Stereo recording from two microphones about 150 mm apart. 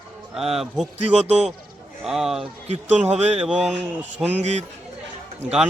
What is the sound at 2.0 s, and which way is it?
A man's voice, 5° right (ahead or behind).